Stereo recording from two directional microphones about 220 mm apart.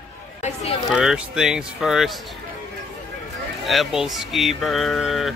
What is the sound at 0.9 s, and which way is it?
Speech, 5° right (ahead or behind).